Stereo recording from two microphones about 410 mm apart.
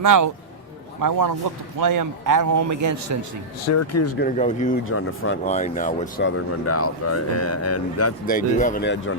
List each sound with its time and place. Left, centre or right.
0.0 s a man's voice: right
3.7 s speech: left
4.2 s speech: centre
4.9 s speech: left
5.5 s speech: centre; by 8.1 s left
8.3 s speech: centre